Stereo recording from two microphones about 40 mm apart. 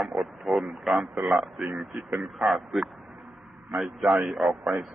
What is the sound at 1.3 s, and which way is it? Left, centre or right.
Speech, centre.